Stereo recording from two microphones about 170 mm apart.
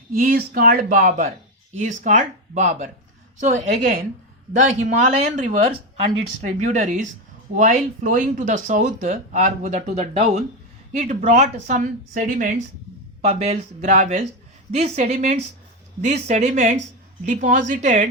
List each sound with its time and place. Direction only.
0.1 s speech: 60° right (ahead or behind)
13.2 s a woman's voice: 40° right (ahead or behind)